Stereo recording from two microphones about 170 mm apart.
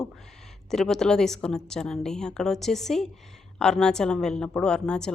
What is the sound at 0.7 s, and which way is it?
A woman's voice, 5° left (ahead or behind).